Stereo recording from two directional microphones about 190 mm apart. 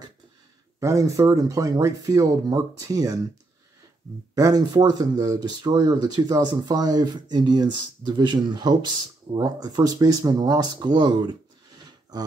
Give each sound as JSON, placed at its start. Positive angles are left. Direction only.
{"t": 0.7, "sound": "speech", "side_deg": -15}
{"t": 4.4, "sound": "speech", "side_deg": -20}
{"t": 11.8, "sound": "a sound", "side_deg": -20}